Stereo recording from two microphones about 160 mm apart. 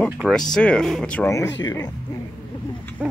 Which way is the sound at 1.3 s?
20° left (ahead or behind).